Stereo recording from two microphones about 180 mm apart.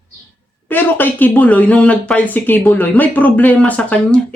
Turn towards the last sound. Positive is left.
turn(degrees=5)  # may be behind; listen again after turning